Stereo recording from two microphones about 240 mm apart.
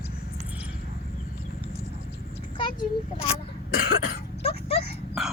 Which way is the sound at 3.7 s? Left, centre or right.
Left.